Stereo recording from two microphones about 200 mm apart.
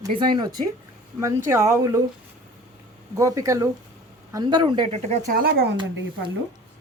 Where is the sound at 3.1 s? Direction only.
15° right (ahead or behind); by 5.8 s 50° right (ahead or behind).